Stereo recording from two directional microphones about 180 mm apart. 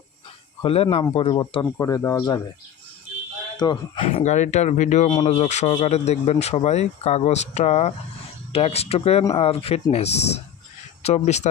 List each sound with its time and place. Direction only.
0.6 s speech: 35° left (ahead or behind)
3.6 s speech: 25° left (ahead or behind)
5.0 s speech: 25° left (ahead or behind)
5.4 s speech: 40° left (ahead or behind)